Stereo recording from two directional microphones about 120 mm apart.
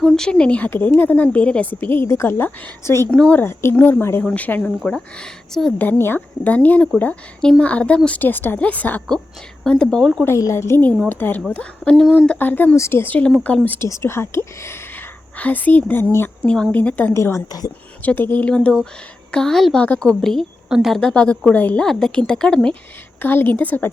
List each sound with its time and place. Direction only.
0.0 s a woman's voice: 5° left (ahead or behind); by 3.1 s 20° left (ahead or behind)
3.1 s a woman's voice: 10° left (ahead or behind)
10.2 s a woman's voice: 25° left (ahead or behind)
13.8 s a woman's voice: 25° left (ahead or behind)
17.2 s speech: 25° left (ahead or behind)
18.0 s a woman's voice: 15° left (ahead or behind)
23.2 s a woman's voice: 15° left (ahead or behind)